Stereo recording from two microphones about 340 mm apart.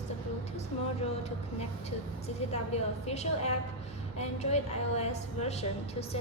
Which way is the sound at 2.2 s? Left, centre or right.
Centre.